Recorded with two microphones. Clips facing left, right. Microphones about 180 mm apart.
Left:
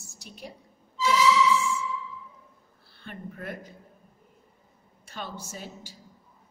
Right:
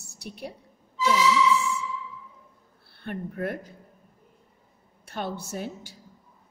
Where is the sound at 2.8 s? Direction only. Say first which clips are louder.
Right 6 dB; 60° right (ahead or behind).